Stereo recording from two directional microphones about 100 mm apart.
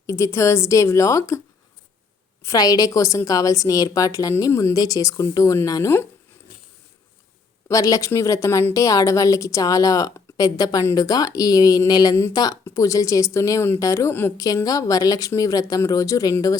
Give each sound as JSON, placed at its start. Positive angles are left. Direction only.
{"t": 0.0, "sound": "a woman's voice", "side_deg": 30}
{"t": 2.5, "sound": "a woman's voice", "side_deg": 40}
{"t": 7.7, "sound": "a woman's voice", "side_deg": 35}
{"t": 12.1, "sound": "a woman's voice", "side_deg": 25}
{"t": 14.3, "sound": "a woman's voice", "side_deg": 40}